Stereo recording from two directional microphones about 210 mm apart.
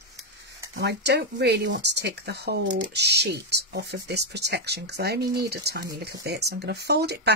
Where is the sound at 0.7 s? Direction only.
55° right (ahead or behind).